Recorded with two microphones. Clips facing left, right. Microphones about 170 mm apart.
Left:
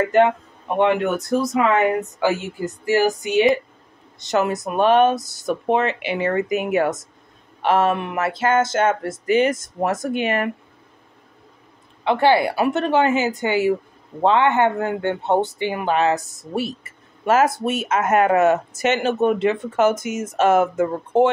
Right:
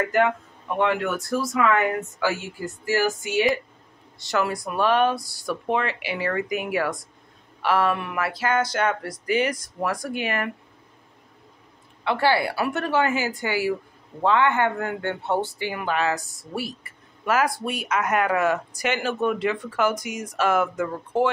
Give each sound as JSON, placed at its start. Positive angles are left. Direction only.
{"t": 0.0, "sound": "speech", "side_deg": 20}
{"t": 12.0, "sound": "speech", "side_deg": 20}